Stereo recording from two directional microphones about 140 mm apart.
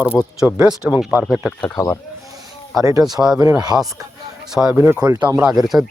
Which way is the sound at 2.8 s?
25° right (ahead or behind).